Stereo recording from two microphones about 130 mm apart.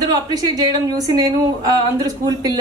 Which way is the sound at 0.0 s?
30° right (ahead or behind).